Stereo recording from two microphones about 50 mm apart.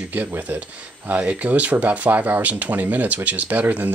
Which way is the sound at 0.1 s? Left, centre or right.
Right.